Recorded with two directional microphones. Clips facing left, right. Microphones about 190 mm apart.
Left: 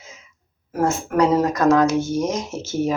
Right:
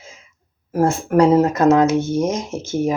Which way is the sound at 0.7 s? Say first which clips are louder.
Right 4 dB; 30° right (ahead or behind).